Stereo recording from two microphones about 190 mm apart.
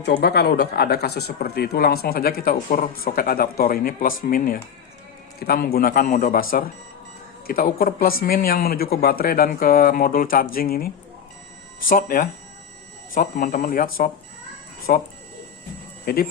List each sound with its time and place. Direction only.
0.0 s speech: 60° left (ahead or behind)
16.1 s speech: 50° left (ahead or behind)